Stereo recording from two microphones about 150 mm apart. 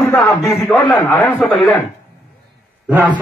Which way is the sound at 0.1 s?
Centre (ahead or behind).